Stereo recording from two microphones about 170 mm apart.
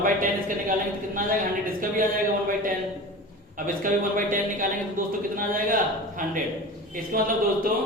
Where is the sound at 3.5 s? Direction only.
50° right (ahead or behind).